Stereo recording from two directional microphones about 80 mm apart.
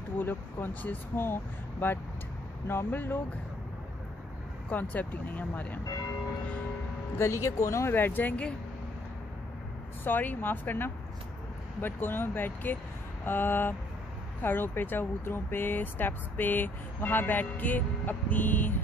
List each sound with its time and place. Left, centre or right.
0.2 s speech: left
4.9 s speech: left
7.2 s speech: left
7.9 s speech: left
10.0 s speech: left